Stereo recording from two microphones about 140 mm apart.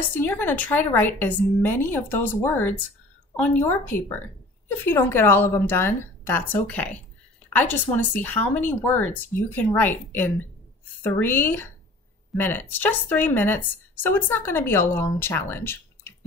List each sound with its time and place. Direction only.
0.1 s speech: 15° left (ahead or behind)